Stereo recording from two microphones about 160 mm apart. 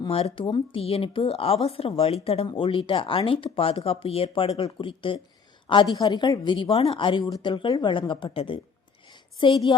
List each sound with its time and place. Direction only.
0.0 s speech: 40° left (ahead or behind)